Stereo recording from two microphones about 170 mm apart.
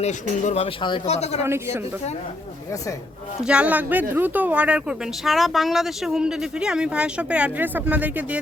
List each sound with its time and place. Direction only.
0.0 s speech: 40° left (ahead or behind)
1.4 s speech: 15° right (ahead or behind)
3.4 s speech: 5° right (ahead or behind)